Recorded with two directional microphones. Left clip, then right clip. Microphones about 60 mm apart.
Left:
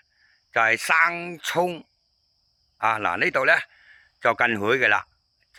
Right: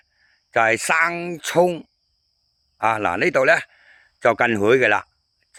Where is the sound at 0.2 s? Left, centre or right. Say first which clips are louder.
Right 3 dB; right.